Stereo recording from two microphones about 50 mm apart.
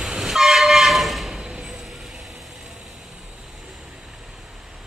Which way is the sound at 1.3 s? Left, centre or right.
Centre.